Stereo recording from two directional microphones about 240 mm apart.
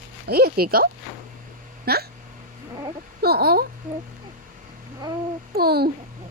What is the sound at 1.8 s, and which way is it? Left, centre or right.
Hiccup, right.